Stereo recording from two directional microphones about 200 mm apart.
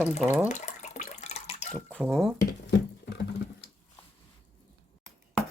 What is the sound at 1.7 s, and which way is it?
Speech, 5° left (ahead or behind).